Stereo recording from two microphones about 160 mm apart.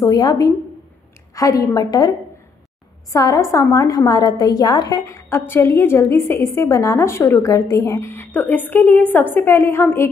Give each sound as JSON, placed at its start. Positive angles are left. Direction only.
{"t": 0.0, "sound": "a woman's voice", "side_deg": 25}